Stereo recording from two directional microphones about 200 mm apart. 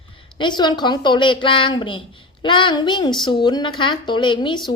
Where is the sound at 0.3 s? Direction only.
25° left (ahead or behind).